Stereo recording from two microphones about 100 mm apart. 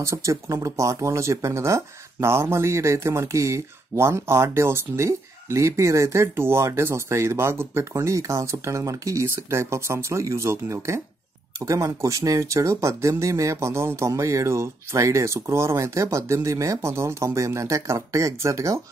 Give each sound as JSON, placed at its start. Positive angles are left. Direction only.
{"t": 0.0, "sound": "speech", "side_deg": -30}